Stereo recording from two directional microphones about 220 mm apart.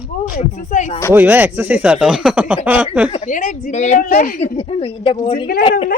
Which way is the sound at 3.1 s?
35° left (ahead or behind).